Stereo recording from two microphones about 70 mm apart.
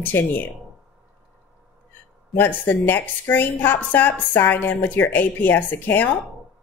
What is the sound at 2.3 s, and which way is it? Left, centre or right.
A woman's voice, left.